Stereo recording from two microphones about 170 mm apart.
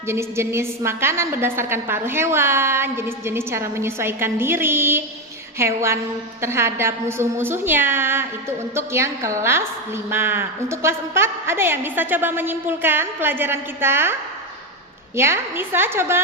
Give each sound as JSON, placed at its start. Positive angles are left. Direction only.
{"t": 0.1, "sound": "a woman's voice", "side_deg": -15}